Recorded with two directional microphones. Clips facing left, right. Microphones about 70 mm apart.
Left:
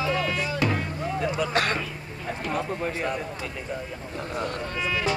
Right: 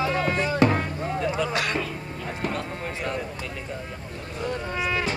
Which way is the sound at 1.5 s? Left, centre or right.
Left.